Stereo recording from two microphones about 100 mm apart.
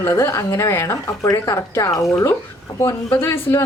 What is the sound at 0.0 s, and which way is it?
Speech, 25° left (ahead or behind).